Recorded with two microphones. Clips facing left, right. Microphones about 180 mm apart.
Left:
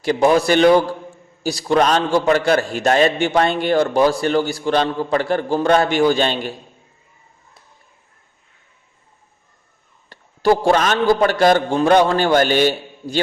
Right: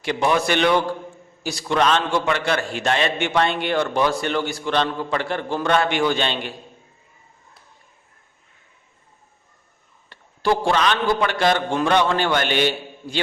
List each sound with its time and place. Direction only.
0.0 s a man's voice: 40° left (ahead or behind)
10.1 s a man's voice: 40° left (ahead or behind)